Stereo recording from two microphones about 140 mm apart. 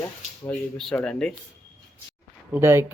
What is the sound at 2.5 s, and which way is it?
Speech, 15° right (ahead or behind).